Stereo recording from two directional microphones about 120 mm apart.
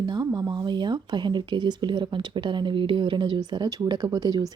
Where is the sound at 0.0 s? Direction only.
35° right (ahead or behind).